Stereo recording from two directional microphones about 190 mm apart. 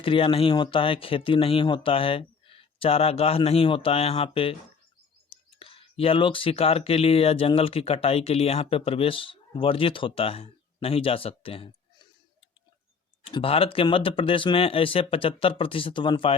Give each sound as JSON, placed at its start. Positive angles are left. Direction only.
{"t": 0.0, "sound": "speech", "side_deg": 25}
{"t": 13.2, "sound": "speech", "side_deg": 30}